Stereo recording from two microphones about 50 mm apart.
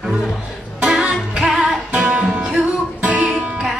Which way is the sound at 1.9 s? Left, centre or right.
Right.